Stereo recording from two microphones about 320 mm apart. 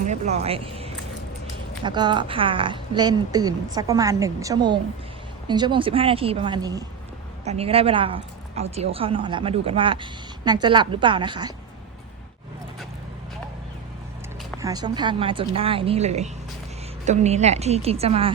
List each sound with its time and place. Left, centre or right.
0.1 s speech: right
14.6 s a woman's voice: centre